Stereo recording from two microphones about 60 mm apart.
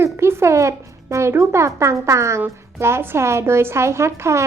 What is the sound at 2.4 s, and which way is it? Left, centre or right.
A woman's voice, right.